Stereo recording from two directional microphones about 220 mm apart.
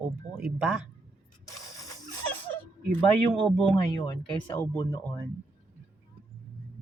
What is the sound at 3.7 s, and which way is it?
Speech, 15° left (ahead or behind).